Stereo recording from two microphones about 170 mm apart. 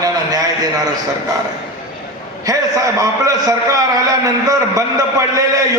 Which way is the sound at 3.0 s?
20° right (ahead or behind).